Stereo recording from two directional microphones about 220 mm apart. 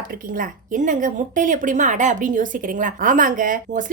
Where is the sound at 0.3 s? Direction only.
35° right (ahead or behind).